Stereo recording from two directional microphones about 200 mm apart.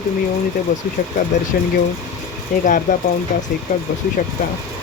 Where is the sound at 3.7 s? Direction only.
35° left (ahead or behind).